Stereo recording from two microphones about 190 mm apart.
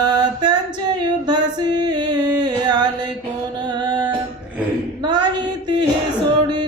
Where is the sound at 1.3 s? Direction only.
20° right (ahead or behind).